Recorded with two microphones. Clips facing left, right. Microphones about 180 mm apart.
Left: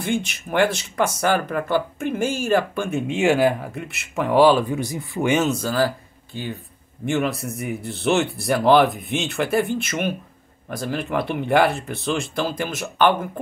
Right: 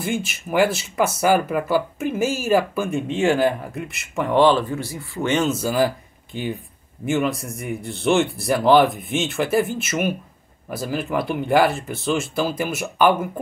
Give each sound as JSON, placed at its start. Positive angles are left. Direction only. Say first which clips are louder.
{"t": 0.0, "sound": "speech", "louder": "left 1 dB", "side_deg": -5}
{"t": 5.5, "sound": "speech", "louder": "right 1 dB", "side_deg": -10}
{"t": 7.1, "sound": "speech", "louder": "right 1 dB", "side_deg": 0}